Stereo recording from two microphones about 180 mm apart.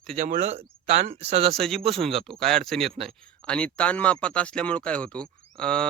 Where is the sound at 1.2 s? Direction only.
35° right (ahead or behind).